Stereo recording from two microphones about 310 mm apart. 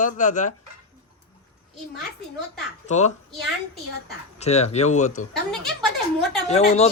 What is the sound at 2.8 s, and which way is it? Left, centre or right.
Speech, left.